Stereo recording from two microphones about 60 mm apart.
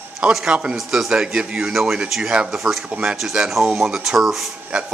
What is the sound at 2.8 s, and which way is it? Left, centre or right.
Speech, centre.